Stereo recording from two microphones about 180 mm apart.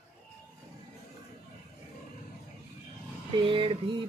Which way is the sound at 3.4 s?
30° right (ahead or behind).